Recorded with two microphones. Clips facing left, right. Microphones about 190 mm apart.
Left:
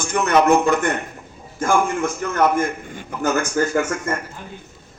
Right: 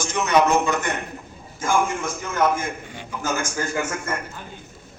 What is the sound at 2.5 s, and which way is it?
Speech, 55° left (ahead or behind).